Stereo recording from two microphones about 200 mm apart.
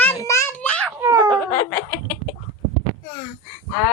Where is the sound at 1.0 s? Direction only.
15° right (ahead or behind).